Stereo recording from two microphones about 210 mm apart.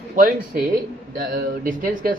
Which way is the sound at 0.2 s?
40° right (ahead or behind).